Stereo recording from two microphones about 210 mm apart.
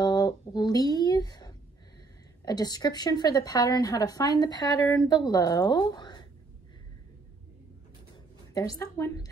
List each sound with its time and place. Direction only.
0.0 s a sound: 20° left (ahead or behind)
2.4 s a woman's voice: 20° left (ahead or behind)
8.5 s a woman's voice: 15° left (ahead or behind)